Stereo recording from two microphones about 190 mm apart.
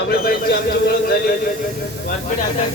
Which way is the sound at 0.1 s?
55° left (ahead or behind).